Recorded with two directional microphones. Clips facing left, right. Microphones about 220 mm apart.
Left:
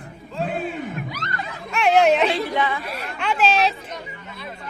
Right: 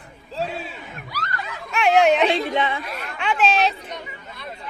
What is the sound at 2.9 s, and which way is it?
Speech, centre (ahead or behind).